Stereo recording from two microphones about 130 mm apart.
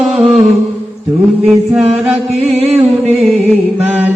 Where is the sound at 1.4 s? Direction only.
10° right (ahead or behind).